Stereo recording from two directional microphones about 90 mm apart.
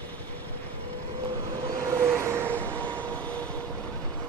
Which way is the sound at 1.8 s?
30° right (ahead or behind).